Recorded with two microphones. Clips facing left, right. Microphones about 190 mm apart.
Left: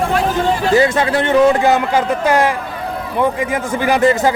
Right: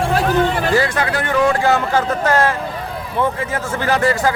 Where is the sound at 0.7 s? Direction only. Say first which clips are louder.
Left 4 dB; 25° left (ahead or behind).